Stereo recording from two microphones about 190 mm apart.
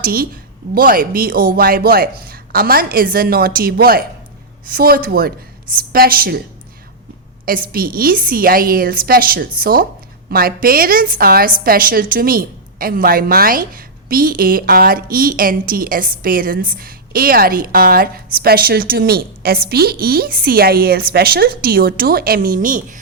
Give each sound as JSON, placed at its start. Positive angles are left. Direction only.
{"t": 0.0, "sound": "a woman's voice", "side_deg": -50}
{"t": 7.4, "sound": "a woman's voice", "side_deg": -50}